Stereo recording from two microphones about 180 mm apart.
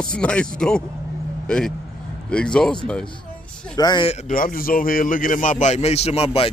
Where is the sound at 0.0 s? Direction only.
5° left (ahead or behind).